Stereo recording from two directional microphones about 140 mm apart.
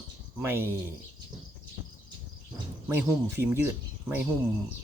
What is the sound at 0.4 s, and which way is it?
Speech, 15° right (ahead or behind).